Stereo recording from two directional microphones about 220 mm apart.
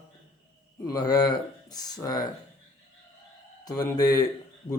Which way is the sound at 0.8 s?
15° left (ahead or behind).